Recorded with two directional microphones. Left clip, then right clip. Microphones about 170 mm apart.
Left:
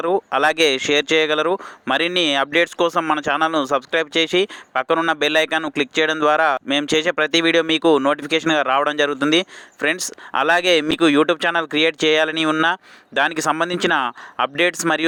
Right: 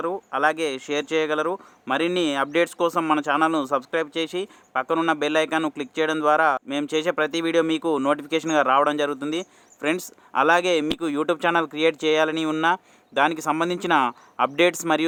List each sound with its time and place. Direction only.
0.0 s speech: 25° left (ahead or behind)